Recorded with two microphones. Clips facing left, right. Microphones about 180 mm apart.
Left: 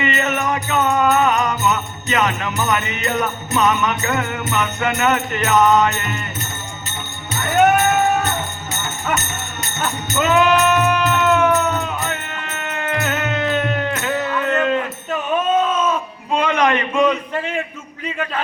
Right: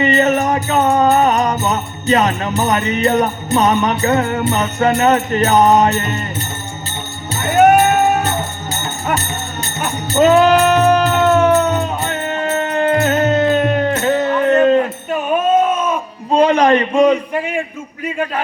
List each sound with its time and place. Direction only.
0.0 s music: 35° right (ahead or behind)
8.7 s music: 30° right (ahead or behind)
15.6 s a sound: 10° right (ahead or behind)
16.3 s a man's voice: 35° right (ahead or behind)
17.3 s a man's voice: 10° right (ahead or behind)